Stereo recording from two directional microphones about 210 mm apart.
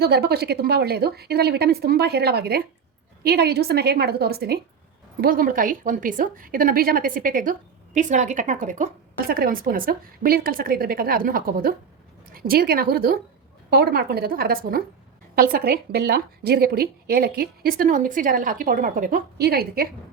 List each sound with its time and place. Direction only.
0.0 s a woman's voice: 50° right (ahead or behind)